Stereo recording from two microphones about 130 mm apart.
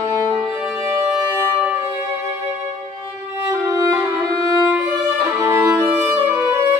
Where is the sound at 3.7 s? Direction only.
20° right (ahead or behind).